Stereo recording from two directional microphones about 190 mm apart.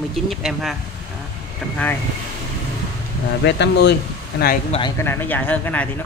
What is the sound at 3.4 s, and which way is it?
Speech, 65° left (ahead or behind).